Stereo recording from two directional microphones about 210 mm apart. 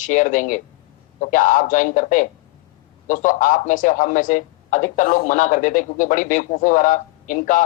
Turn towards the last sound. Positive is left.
turn(degrees=40)  # may be behind; listen again after turning